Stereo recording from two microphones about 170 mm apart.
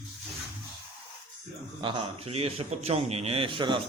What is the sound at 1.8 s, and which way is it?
A man's voice, 30° right (ahead or behind).